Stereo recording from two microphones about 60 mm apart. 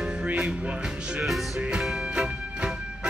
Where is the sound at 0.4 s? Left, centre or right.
Centre.